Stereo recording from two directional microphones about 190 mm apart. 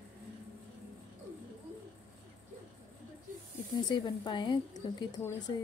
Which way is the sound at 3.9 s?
25° left (ahead or behind).